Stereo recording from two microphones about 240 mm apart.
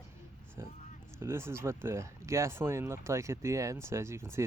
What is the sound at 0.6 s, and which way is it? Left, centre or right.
Speech, centre.